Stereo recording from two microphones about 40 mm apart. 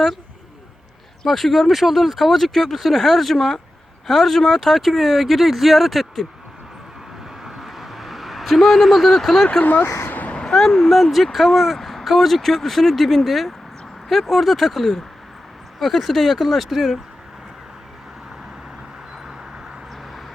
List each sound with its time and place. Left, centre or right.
1.2 s speech: centre
7.4 s vehicle: centre
10.2 s a sound: left
10.5 s speech: centre